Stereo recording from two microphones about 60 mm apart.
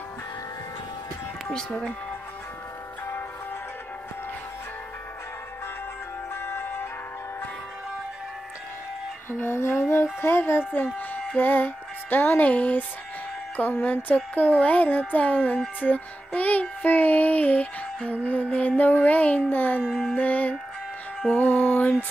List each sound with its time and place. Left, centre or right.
1.5 s speech: centre
6.3 s music: left
9.3 s music: left
10.7 s music: left
13.6 s a sound: left
15.8 s child singing: left
18.2 s music: left
19.8 s music: centre
20.2 s music: left